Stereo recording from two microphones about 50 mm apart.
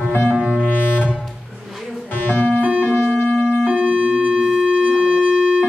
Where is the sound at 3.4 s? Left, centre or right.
Right.